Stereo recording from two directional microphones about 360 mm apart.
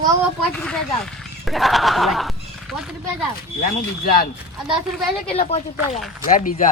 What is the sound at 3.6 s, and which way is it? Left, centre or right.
Speech, left.